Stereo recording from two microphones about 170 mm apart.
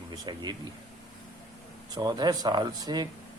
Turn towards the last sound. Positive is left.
turn(degrees=-25)  # may be behind; listen again after turning